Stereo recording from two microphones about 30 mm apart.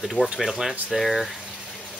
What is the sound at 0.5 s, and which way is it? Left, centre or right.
Speech, centre.